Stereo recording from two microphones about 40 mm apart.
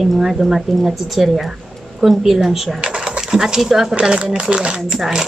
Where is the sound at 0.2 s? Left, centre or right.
Centre.